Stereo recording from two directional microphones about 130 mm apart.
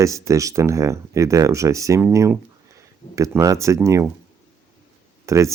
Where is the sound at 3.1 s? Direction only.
25° right (ahead or behind).